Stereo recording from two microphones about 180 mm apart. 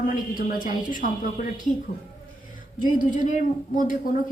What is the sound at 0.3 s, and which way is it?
A woman's voice, 50° left (ahead or behind).